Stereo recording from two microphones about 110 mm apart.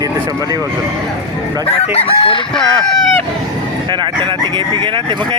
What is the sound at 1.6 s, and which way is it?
Chicken, 65° left (ahead or behind).